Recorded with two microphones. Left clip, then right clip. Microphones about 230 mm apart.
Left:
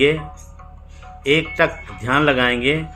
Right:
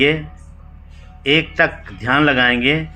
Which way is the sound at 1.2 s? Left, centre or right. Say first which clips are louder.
Right 2 dB; centre.